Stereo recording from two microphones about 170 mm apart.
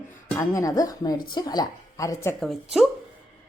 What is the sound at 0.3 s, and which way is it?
Speech, 20° left (ahead or behind).